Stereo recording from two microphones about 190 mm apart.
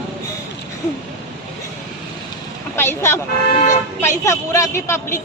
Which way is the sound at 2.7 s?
10° left (ahead or behind).